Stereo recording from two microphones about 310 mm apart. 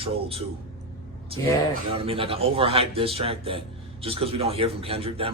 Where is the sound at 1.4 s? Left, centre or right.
Centre.